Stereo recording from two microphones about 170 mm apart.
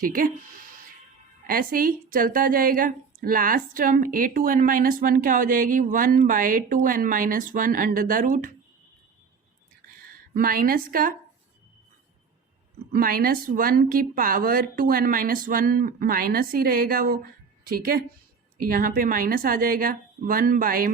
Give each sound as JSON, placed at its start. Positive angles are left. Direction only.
{"t": 0.0, "sound": "a woman's voice", "side_deg": -55}
{"t": 1.5, "sound": "a woman's voice", "side_deg": -55}
{"t": 10.3, "sound": "a woman's voice", "side_deg": -55}
{"t": 12.9, "sound": "a woman's voice", "side_deg": -60}